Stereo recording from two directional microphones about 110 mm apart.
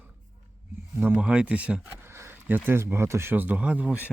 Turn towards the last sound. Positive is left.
turn(degrees=-15)  # may be behind; listen again after turning